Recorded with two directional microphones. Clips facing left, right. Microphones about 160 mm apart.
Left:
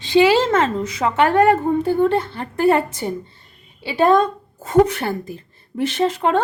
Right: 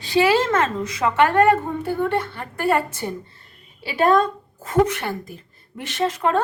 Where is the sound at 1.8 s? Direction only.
25° left (ahead or behind).